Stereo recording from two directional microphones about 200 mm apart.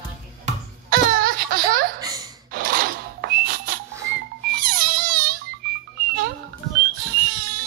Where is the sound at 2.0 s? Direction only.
20° right (ahead or behind).